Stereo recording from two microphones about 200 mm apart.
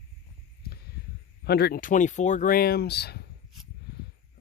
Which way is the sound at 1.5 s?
50° left (ahead or behind).